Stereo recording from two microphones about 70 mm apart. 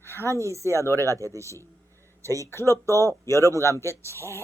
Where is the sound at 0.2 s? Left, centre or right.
Right.